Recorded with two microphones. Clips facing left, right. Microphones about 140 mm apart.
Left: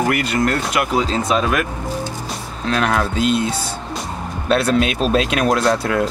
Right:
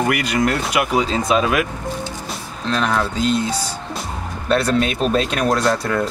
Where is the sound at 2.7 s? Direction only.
5° left (ahead or behind).